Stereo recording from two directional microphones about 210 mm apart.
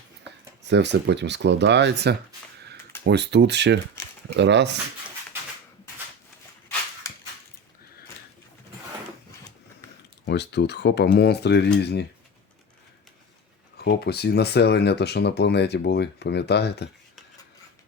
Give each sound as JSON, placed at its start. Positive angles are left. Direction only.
{"t": 0.7, "sound": "speech", "side_deg": -55}
{"t": 7.1, "sound": "a sound", "side_deg": 15}
{"t": 10.2, "sound": "speech", "side_deg": 55}
{"t": 13.7, "sound": "speech", "side_deg": 50}